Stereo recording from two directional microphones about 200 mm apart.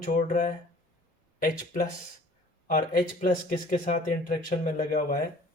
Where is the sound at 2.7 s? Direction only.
40° left (ahead or behind).